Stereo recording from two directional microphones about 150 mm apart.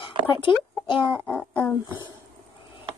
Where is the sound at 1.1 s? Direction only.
10° left (ahead or behind).